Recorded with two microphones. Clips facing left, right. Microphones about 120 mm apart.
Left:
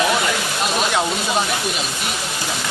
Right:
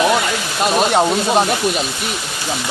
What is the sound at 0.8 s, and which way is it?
Speech, 40° right (ahead or behind).